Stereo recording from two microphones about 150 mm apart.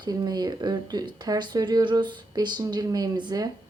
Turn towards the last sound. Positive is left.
turn(degrees=-30)  # may be behind; listen again after turning